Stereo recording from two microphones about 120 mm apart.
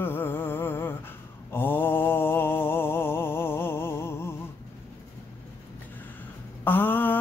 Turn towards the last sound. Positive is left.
turn(degrees=15)  # may be behind; listen again after turning